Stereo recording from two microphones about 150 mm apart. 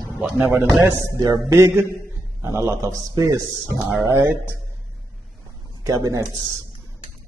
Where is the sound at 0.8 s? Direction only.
20° right (ahead or behind).